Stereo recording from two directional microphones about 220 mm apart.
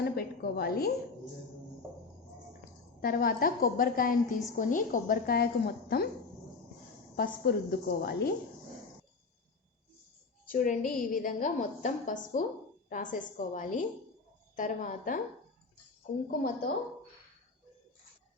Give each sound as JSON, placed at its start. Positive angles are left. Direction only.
{"t": 0.0, "sound": "a sound", "side_deg": 45}
{"t": 3.0, "sound": "a woman's voice", "side_deg": 40}
{"t": 7.2, "sound": "a woman's voice", "side_deg": 45}
{"t": 10.5, "sound": "a woman's voice", "side_deg": 40}